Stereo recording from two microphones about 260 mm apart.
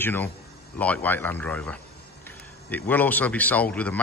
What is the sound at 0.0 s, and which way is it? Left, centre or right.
A man's voice, centre.